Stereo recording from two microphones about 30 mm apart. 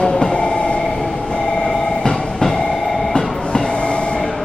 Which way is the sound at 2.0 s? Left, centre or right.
Left.